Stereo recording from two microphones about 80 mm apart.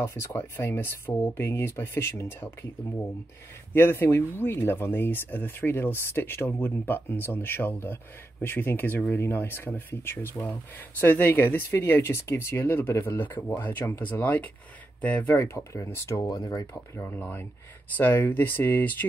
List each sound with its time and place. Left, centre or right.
0.0 s speech: left
3.7 s speech: left
15.3 s speech: left
16.3 s speech: left
16.7 s speech: left